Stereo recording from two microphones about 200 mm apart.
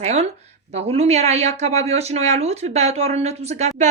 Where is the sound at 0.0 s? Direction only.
35° right (ahead or behind).